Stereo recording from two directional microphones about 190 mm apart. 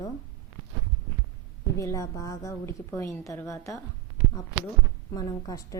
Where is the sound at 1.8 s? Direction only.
15° left (ahead or behind).